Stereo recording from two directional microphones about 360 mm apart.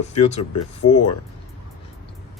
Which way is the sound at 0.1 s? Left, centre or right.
Centre.